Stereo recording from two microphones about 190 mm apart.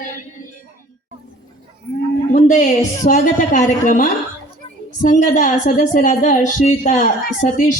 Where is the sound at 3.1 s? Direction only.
40° left (ahead or behind).